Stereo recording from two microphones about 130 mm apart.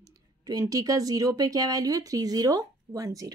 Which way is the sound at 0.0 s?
25° right (ahead or behind).